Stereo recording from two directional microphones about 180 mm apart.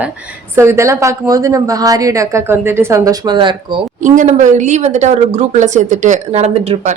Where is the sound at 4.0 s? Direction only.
40° right (ahead or behind).